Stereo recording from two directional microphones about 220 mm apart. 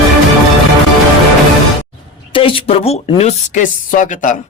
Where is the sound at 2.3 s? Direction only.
25° left (ahead or behind).